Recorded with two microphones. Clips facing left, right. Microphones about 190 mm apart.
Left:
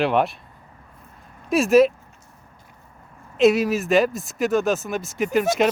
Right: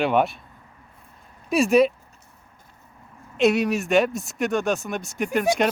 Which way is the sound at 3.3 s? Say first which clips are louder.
Left 3 dB; centre (ahead or behind).